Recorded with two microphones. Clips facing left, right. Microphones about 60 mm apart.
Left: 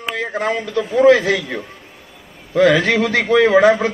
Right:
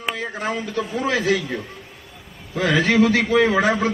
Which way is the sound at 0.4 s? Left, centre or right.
Left.